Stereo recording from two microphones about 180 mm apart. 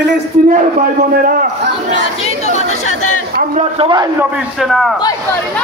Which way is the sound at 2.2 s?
35° left (ahead or behind).